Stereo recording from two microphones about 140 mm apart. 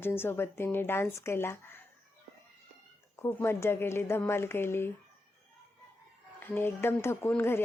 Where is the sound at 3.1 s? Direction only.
15° left (ahead or behind).